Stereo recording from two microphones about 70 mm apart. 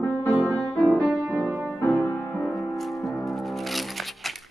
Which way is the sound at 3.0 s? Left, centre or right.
Centre.